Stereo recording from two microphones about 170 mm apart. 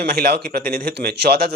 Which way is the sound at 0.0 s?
60° right (ahead or behind).